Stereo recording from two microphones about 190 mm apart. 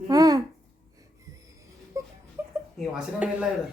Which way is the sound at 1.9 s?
15° right (ahead or behind).